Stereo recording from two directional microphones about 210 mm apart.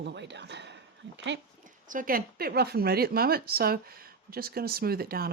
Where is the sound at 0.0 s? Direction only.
55° right (ahead or behind).